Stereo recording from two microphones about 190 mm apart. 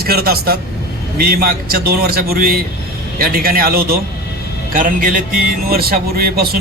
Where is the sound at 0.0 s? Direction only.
55° right (ahead or behind).